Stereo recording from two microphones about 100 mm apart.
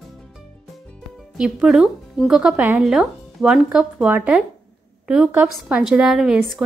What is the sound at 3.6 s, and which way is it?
A woman's voice, 15° right (ahead or behind).